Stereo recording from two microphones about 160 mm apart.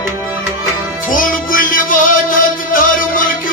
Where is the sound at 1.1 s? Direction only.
60° left (ahead or behind).